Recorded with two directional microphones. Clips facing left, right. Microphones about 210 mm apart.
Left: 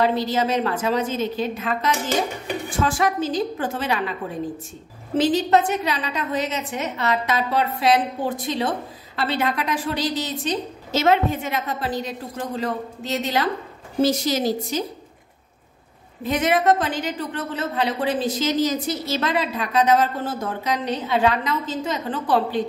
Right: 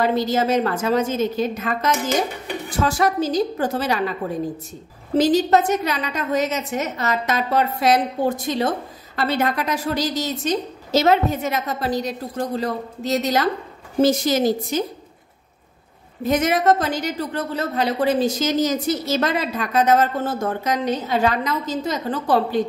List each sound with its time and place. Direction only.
0.0 s a woman's voice: 45° right (ahead or behind)
5.1 s a woman's voice: 40° right (ahead or behind)
14.0 s a woman's voice: 50° right (ahead or behind)
16.3 s a woman's voice: 45° right (ahead or behind)